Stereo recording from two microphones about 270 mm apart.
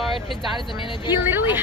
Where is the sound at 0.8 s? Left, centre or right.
Centre.